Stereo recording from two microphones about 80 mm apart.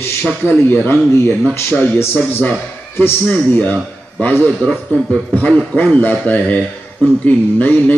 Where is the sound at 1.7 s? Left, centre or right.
Centre.